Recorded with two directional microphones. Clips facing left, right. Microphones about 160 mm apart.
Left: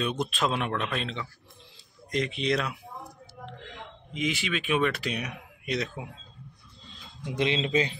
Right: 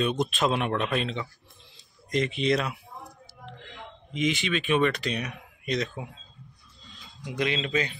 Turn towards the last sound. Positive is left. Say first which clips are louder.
# left 2 dB
turn(degrees=25)  # may be behind; listen again after turning